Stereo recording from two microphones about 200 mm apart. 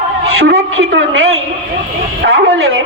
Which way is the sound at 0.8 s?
80° right.